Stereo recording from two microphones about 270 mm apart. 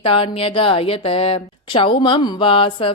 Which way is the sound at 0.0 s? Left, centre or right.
Centre.